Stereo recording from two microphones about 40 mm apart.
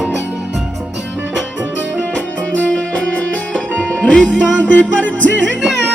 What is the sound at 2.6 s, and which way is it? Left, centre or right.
Music, left.